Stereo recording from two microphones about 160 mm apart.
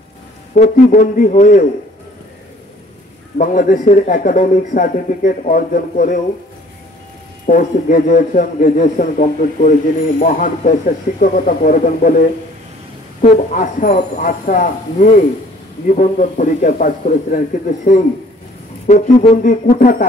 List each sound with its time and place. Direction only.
0.9 s a man's voice: 55° left (ahead or behind)
3.3 s a man's voice: 55° left (ahead or behind)
7.4 s a man's voice: 60° left (ahead or behind)
18.9 s a man's voice: 45° left (ahead or behind)